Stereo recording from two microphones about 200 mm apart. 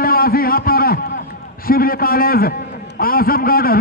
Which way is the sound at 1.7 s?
45° left (ahead or behind).